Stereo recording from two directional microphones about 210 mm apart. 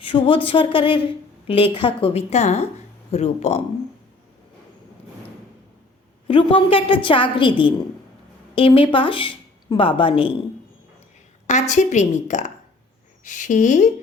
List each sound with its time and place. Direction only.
0.0 s a woman's voice: 25° left (ahead or behind)
6.2 s a woman's voice: 25° left (ahead or behind)
11.4 s a woman's voice: 35° left (ahead or behind)